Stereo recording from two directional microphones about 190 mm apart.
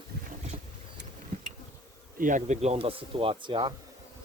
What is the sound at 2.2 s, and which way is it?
Speech, 45° right (ahead or behind).